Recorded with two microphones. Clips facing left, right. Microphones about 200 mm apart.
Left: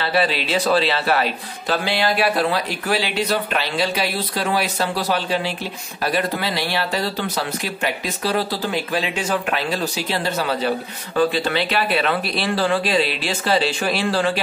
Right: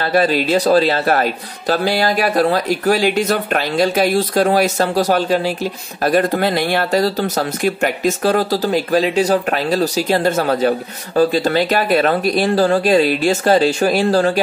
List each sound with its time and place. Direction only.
0.0 s speech: 45° right (ahead or behind)